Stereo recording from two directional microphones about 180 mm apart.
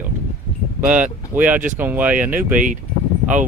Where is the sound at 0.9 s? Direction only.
10° right (ahead or behind).